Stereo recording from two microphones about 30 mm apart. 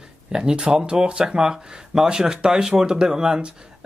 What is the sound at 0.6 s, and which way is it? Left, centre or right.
Speech, right.